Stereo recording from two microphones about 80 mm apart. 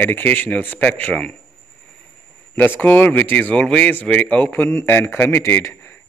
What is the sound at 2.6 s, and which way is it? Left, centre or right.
Speech, left.